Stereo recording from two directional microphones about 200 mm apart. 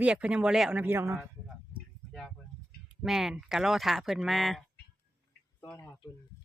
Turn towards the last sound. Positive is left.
turn(degrees=10)  # may be behind; listen again after turning